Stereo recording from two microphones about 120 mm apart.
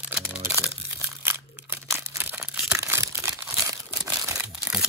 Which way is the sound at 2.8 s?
25° right (ahead or behind).